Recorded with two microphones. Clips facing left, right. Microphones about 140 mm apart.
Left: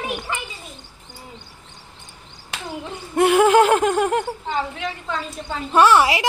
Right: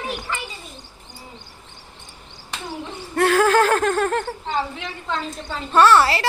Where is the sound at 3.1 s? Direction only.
20° left (ahead or behind).